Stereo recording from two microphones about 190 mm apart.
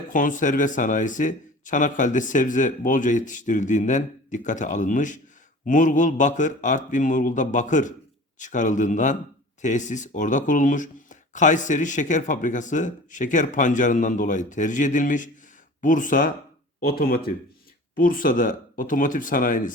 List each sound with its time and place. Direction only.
0.1 s speech: 45° left (ahead or behind)